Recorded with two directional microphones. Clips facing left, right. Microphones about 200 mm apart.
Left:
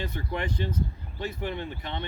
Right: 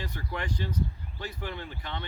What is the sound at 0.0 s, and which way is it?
Speech, 25° left (ahead or behind).